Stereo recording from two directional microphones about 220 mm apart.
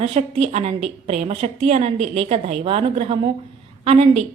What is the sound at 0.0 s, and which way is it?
A woman's voice, 30° right (ahead or behind).